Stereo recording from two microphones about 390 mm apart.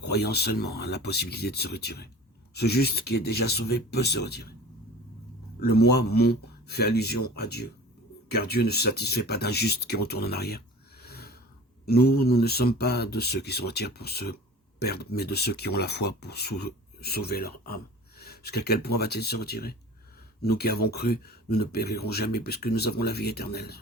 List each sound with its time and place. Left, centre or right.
0.0 s speech: left
5.5 s speech: left
11.0 s snort: left
11.9 s speech: left